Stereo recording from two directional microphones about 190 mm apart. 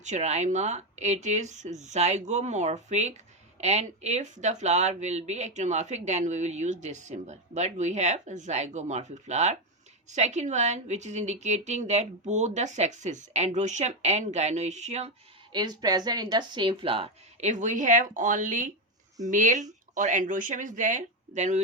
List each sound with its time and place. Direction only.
0.0 s speech: 35° right (ahead or behind)
15.5 s speech: 20° right (ahead or behind); by 21.6 s 35° right (ahead or behind)